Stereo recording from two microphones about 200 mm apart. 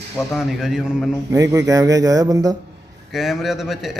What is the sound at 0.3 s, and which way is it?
Speech, 5° right (ahead or behind).